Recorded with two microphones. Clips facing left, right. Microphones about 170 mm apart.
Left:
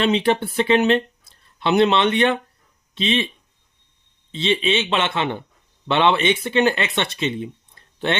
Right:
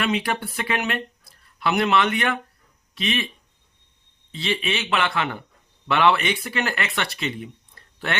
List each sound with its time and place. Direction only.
0.0 s speech: 25° left (ahead or behind)
4.3 s speech: 25° left (ahead or behind)